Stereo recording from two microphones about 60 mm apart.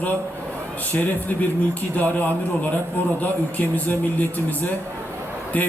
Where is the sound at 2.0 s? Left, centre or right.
Left.